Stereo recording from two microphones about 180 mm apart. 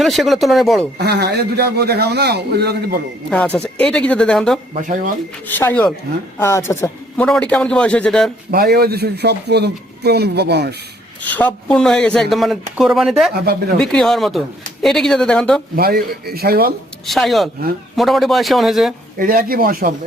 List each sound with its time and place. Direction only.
0.0 s speech: centre (ahead or behind)
0.9 s a man's voice: 65° right (ahead or behind)
3.2 s speech: 5° left (ahead or behind)
4.7 s speech: 45° right (ahead or behind)
5.5 s a man's voice: 10° left (ahead or behind)
8.4 s a man's voice: 60° right (ahead or behind)
11.2 s speech: 10° left (ahead or behind)
13.3 s a man's voice: 60° right (ahead or behind)
13.7 s speech: 5° left (ahead or behind)
15.7 s a man's voice: 60° right (ahead or behind)
17.1 s speech: centre (ahead or behind)
19.2 s speech: 50° right (ahead or behind)